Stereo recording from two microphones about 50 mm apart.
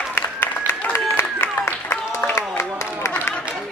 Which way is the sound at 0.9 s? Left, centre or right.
Left.